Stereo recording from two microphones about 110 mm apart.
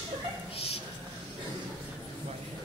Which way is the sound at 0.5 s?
60° left (ahead or behind).